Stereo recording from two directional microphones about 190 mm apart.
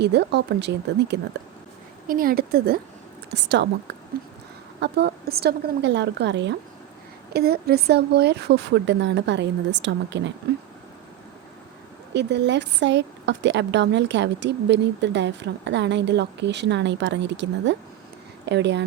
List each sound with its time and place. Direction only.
0.0 s a woman's voice: 60° right (ahead or behind)
2.0 s speech: 50° right (ahead or behind)
3.3 s a woman's voice: 65° right (ahead or behind)
12.1 s a woman's voice: 65° right (ahead or behind)